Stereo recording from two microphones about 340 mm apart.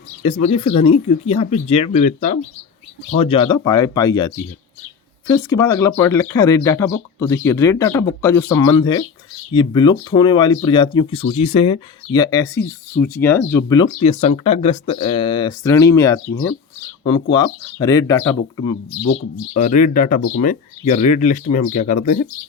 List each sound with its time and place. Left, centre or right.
0.3 s speech: centre
5.3 s speech: centre
19.5 s speech: left